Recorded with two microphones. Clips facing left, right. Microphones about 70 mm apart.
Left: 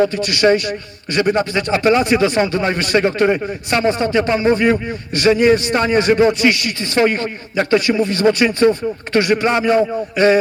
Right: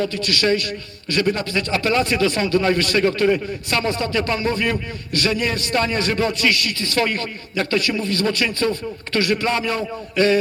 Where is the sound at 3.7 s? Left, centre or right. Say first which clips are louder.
Left 6 dB; left.